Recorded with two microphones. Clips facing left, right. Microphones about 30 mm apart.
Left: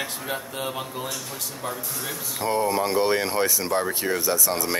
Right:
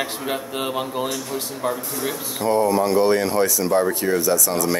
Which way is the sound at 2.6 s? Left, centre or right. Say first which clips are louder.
Right 4 dB; centre.